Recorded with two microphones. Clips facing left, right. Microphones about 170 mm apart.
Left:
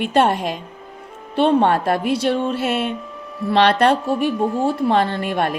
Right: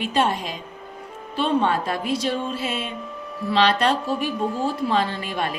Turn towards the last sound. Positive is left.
turn(degrees=60)  # may be behind; listen again after turning